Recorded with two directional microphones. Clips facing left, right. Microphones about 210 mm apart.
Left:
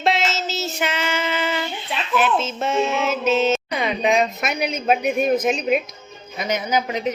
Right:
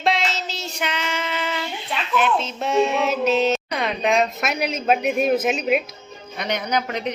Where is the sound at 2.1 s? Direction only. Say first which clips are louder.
Left 1 dB; 5° left (ahead or behind).